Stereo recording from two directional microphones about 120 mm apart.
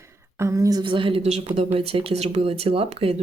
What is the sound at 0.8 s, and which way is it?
Speech, 45° right (ahead or behind).